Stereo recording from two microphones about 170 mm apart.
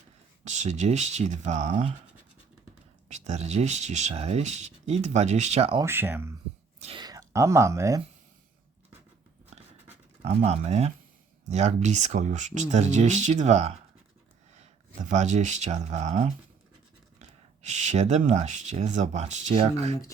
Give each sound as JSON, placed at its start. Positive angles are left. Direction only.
{"t": 0.4, "sound": "speech", "side_deg": -45}
{"t": 3.1, "sound": "speech", "side_deg": -40}
{"t": 5.8, "sound": "speech", "side_deg": -15}
{"t": 6.8, "sound": "speech", "side_deg": -25}
{"t": 10.2, "sound": "speech", "side_deg": -40}